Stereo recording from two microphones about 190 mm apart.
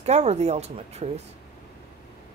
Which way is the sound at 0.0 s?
35° right (ahead or behind).